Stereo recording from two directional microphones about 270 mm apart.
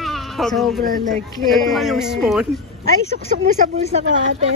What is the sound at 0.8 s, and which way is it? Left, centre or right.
Speech, right.